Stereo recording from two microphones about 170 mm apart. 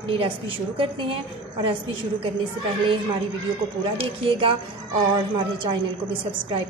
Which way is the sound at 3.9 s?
35° right (ahead or behind).